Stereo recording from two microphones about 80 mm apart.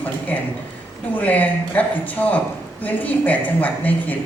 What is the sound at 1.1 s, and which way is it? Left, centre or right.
A woman's voice, centre.